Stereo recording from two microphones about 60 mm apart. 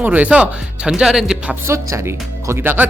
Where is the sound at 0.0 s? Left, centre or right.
Right.